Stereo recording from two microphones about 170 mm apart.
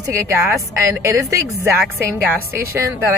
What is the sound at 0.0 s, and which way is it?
A woman's voice, 15° right (ahead or behind).